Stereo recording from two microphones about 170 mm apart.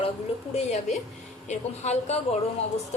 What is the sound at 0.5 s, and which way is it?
A woman's voice, 40° left (ahead or behind).